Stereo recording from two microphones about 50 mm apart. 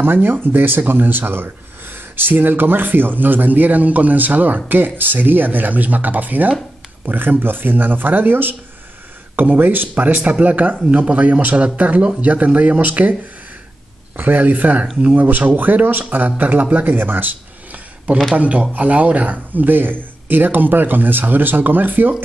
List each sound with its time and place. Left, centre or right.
0.0 s speech: right
14.1 s speech: right
15.2 s speech: right
18.3 s speech: right